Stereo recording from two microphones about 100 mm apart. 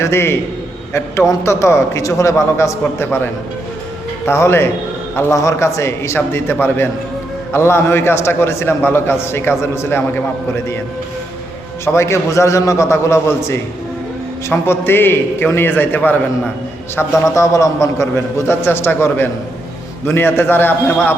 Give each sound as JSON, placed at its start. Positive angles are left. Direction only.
{"t": 0.0, "sound": "a man's voice", "side_deg": 25}
{"t": 4.3, "sound": "a man's voice", "side_deg": 25}
{"t": 11.9, "sound": "a man's voice", "side_deg": 30}